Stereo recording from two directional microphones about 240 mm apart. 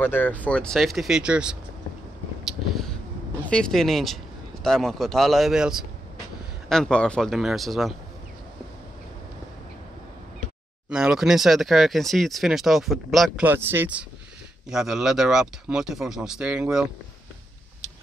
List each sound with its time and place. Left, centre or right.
0.0 s speech: centre
2.4 s a sound: centre
3.4 s speech: centre
10.9 s speech: centre